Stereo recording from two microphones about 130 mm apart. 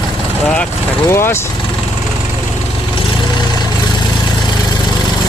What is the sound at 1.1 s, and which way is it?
Speech, 20° left (ahead or behind).